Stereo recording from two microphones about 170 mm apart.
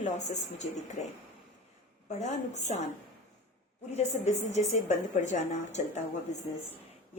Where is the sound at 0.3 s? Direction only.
45° left (ahead or behind).